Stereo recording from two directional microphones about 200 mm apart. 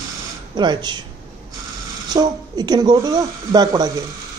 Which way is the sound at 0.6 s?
20° right (ahead or behind).